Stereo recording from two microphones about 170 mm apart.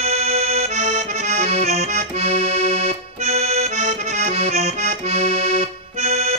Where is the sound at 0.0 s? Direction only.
40° right (ahead or behind).